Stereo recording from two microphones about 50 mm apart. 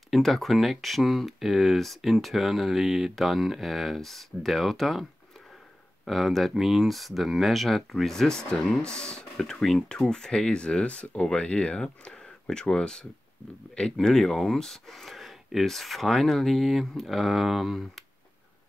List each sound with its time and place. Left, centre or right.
0.1 s speech: centre
6.0 s speech: centre